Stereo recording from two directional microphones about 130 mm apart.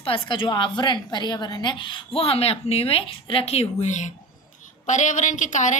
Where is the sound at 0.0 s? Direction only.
45° left (ahead or behind).